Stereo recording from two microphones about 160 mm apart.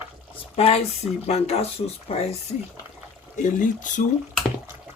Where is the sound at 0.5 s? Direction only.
40° left (ahead or behind).